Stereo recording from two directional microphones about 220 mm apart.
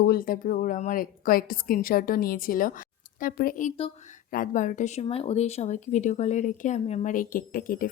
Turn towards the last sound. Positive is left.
turn(degrees=40)  # may be behind; listen again after turning